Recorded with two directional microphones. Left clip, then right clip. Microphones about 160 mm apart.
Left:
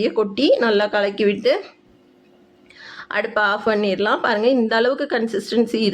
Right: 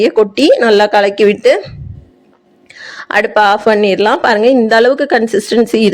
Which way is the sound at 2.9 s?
50° right (ahead or behind).